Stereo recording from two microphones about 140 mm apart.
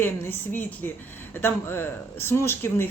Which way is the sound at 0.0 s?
15° left (ahead or behind).